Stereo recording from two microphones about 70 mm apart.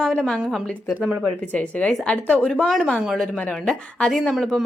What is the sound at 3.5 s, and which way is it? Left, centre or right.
Speech, centre.